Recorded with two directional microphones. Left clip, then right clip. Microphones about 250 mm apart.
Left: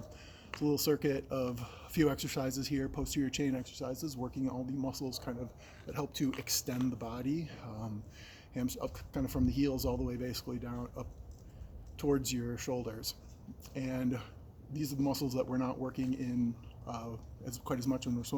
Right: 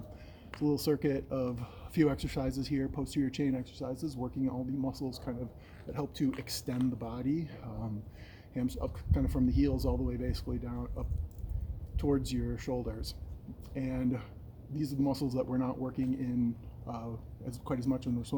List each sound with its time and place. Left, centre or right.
0.5 s speech: centre